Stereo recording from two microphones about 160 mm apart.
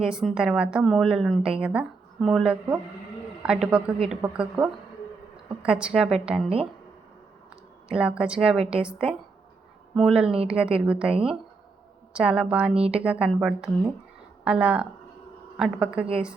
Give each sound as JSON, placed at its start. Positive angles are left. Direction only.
{"t": 0.0, "sound": "a woman's voice", "side_deg": -5}
{"t": 7.9, "sound": "a woman's voice", "side_deg": -5}
{"t": 12.7, "sound": "speech", "side_deg": -40}
{"t": 13.0, "sound": "a woman's voice", "side_deg": -5}